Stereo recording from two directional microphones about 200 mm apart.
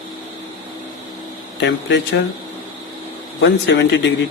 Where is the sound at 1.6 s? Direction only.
60° left (ahead or behind).